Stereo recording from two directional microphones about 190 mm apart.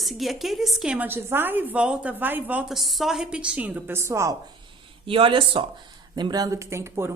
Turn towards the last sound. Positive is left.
turn(degrees=-15)  # may be behind; listen again after turning